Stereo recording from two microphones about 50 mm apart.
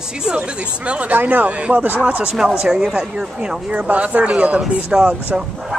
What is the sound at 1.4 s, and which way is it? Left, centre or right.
Speech, right.